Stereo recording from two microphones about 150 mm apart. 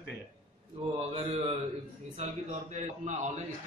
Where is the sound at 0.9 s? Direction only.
45° right (ahead or behind).